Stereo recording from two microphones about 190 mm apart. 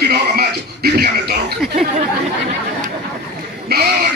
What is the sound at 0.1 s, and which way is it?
Music, 55° right (ahead or behind).